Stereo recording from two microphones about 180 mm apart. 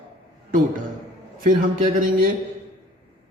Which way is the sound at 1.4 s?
50° right (ahead or behind).